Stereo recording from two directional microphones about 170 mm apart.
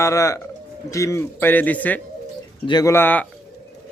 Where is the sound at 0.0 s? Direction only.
20° left (ahead or behind).